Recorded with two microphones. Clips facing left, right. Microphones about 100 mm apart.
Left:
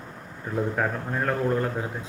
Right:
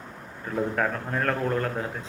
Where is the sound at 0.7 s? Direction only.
15° left (ahead or behind).